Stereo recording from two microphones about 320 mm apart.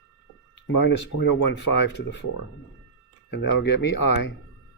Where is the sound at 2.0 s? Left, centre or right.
Left.